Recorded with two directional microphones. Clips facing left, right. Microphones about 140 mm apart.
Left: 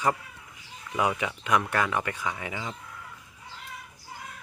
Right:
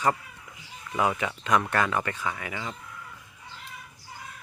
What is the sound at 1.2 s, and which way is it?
Speech, 10° left (ahead or behind).